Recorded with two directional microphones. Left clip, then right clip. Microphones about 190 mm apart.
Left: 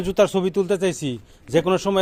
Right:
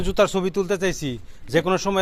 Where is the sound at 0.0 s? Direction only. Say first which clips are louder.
Left 1 dB; 15° left (ahead or behind).